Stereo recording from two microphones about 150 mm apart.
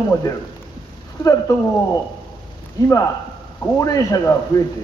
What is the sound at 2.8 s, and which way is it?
A man's voice, 20° left (ahead or behind).